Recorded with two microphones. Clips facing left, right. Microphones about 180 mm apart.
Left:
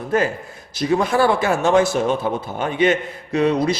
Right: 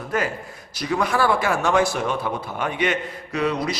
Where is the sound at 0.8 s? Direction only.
25° left (ahead or behind).